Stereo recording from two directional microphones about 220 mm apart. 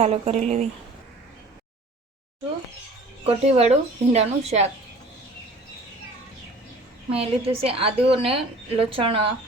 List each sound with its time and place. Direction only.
0.0 s speech: 30° right (ahead or behind)
3.2 s speech: 25° right (ahead or behind)
7.1 s speech: 25° right (ahead or behind)